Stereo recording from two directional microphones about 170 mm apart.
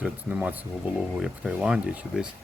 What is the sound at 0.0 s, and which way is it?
Speech, 5° right (ahead or behind).